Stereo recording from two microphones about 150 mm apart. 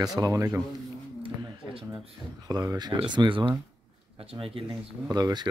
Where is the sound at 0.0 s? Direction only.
25° right (ahead or behind).